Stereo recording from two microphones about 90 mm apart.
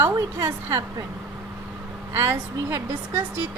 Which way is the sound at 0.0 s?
30° right (ahead or behind).